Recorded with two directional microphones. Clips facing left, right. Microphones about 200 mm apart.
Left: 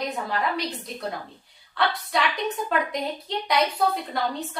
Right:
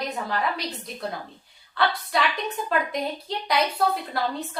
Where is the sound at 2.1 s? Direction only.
Centre (ahead or behind).